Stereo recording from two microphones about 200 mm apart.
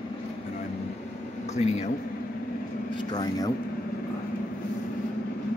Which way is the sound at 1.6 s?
30° left (ahead or behind).